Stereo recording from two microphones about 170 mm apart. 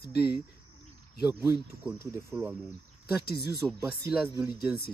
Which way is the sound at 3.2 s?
65° left (ahead or behind).